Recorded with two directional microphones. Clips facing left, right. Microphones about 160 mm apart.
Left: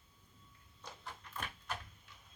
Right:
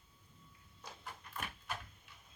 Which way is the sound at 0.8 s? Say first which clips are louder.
Even; 10° right (ahead or behind).